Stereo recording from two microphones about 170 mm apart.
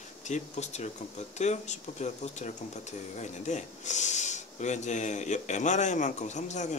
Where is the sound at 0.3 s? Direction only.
40° left (ahead or behind).